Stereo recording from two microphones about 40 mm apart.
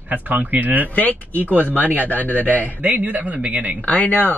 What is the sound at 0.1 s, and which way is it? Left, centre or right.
Speech, right.